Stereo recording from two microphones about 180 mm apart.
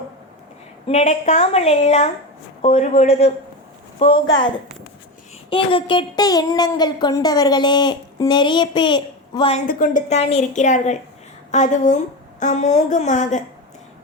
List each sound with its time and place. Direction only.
0.9 s a woman's voice: 40° left (ahead or behind)
9.6 s a woman's voice: 50° left (ahead or behind)